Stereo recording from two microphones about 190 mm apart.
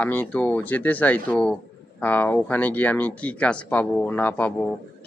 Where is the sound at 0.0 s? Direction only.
10° left (ahead or behind).